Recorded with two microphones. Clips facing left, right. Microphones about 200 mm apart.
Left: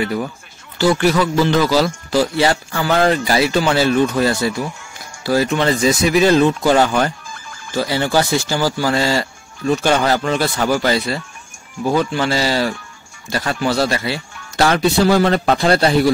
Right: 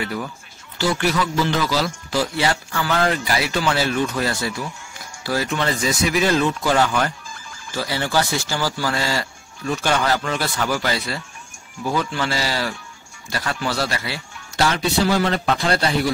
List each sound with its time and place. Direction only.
0.0 s speech: 25° left (ahead or behind)
0.7 s speech: 45° left (ahead or behind); by 14.2 s 25° left (ahead or behind)
14.6 s a man's voice: 45° left (ahead or behind)